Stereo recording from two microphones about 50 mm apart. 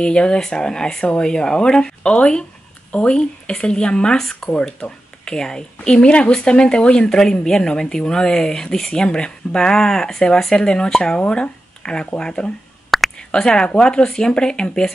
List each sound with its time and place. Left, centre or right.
0.0 s a woman's voice: centre
7.1 s speech: centre
12.9 s a sound: centre
13.3 s speech: centre